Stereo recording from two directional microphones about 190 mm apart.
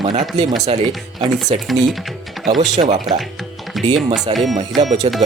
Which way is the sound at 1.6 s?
Centre (ahead or behind).